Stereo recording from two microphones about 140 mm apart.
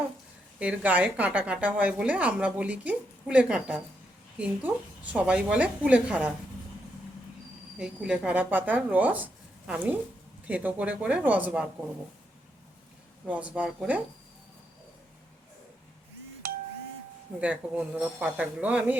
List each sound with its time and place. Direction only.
0.6 s a woman's voice: 10° right (ahead or behind)
5.1 s a woman's voice: 10° right (ahead or behind)
7.8 s a woman's voice: 5° right (ahead or behind)
13.2 s a woman's voice: 10° right (ahead or behind)
16.4 s doorbell: 90° right
17.4 s a woman's voice: 10° right (ahead or behind)